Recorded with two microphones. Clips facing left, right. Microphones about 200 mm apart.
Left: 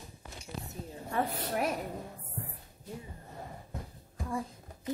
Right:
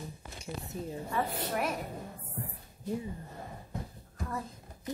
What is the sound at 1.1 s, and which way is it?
Speech, 45° left (ahead or behind).